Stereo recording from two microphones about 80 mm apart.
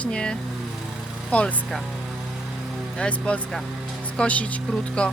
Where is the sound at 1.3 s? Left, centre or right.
Centre.